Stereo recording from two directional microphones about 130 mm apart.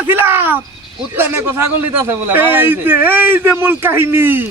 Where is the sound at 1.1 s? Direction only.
15° right (ahead or behind).